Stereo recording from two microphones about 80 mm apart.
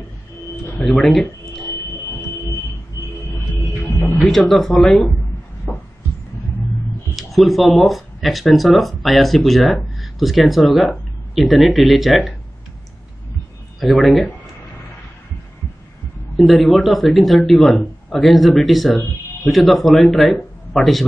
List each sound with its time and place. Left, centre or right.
0.8 s a sound: centre
2.9 s music: left
4.3 s a man's voice: centre
5.7 s heart murmur: centre
7.2 s a man's voice: centre
13.7 s a man's voice: centre
16.3 s a man's voice: centre